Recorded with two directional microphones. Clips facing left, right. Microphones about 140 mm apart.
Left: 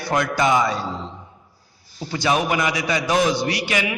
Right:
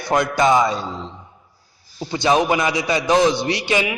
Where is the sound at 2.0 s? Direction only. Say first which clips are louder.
Right 4 dB; 25° right (ahead or behind).